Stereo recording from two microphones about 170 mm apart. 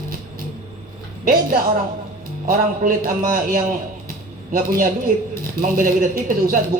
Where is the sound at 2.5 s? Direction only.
55° right (ahead or behind).